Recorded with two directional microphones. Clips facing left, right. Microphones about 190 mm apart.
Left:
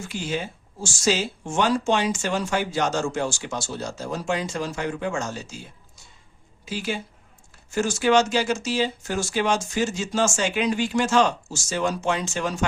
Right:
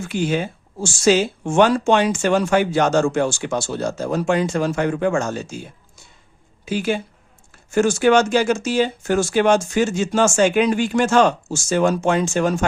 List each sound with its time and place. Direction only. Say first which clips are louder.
0.1 s speech: right 8 dB; 60° right (ahead or behind)
6.7 s speech: right 7 dB; 55° right (ahead or behind)